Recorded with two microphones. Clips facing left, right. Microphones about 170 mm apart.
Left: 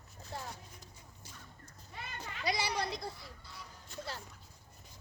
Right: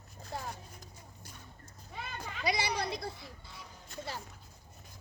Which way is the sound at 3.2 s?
20° right (ahead or behind).